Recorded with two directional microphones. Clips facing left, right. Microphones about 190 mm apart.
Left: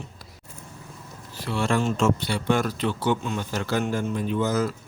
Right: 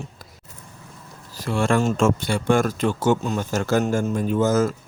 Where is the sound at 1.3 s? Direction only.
45° right (ahead or behind).